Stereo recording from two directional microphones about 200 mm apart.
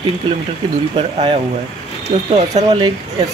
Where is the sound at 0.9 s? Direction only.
30° right (ahead or behind).